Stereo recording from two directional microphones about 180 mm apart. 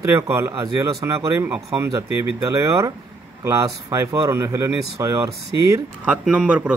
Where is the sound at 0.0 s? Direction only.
15° right (ahead or behind).